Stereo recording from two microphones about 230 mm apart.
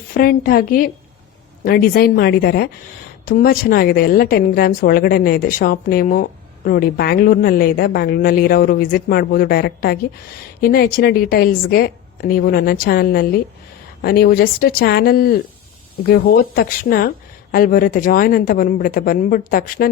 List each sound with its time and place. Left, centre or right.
0.1 s a woman's voice: left